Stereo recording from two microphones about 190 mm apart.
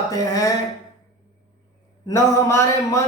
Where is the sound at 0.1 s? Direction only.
20° left (ahead or behind).